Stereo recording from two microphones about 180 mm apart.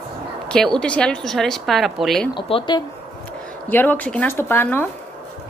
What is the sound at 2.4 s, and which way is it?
Speech, 30° left (ahead or behind).